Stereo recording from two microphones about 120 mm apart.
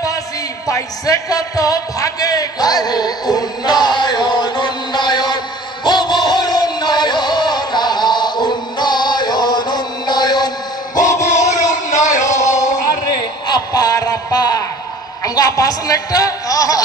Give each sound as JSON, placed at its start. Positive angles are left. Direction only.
{"t": 0.7, "sound": "a man's voice", "side_deg": 25}
{"t": 5.9, "sound": "music", "side_deg": 35}
{"t": 11.2, "sound": "music", "side_deg": 75}
{"t": 13.5, "sound": "a sound", "side_deg": 30}